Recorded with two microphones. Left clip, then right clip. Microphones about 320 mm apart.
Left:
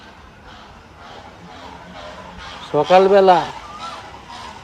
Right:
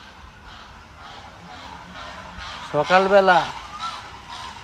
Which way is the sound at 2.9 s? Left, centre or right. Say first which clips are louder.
Left 4 dB; centre.